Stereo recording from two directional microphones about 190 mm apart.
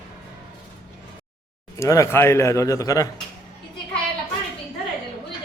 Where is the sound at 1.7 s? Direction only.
15° left (ahead or behind).